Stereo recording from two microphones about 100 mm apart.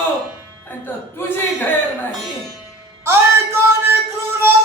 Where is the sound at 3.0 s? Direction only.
25° right (ahead or behind).